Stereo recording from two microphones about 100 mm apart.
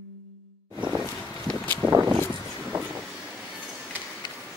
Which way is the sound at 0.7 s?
10° right (ahead or behind).